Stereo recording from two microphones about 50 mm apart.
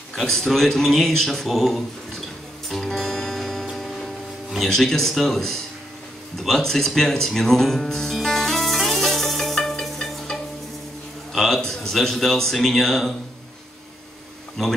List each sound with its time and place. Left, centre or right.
0.1 s a sound: centre
0.4 s speech: centre
2.7 s music: centre
4.6 s speech: centre
6.3 s music: centre
11.3 s speech: centre
14.6 s speech: centre